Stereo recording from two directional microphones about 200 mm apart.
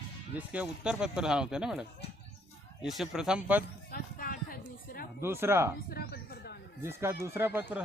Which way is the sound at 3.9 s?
45° left (ahead or behind).